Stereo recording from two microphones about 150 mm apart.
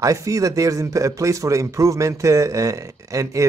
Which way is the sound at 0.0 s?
20° right (ahead or behind).